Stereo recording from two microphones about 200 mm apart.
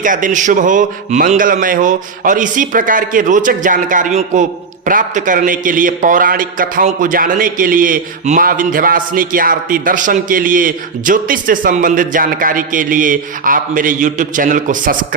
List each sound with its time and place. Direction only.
0.0 s a man's voice: 40° right (ahead or behind)